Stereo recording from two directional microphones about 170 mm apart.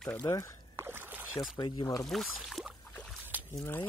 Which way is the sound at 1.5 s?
30° left (ahead or behind).